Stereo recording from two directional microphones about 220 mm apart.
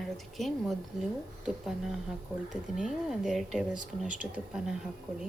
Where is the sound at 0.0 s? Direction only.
Centre (ahead or behind).